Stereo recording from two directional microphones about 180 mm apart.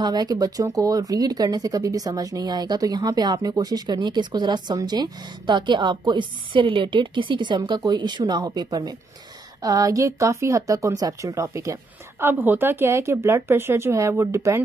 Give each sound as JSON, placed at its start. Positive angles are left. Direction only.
{"t": 0.0, "sound": "speech", "side_deg": -25}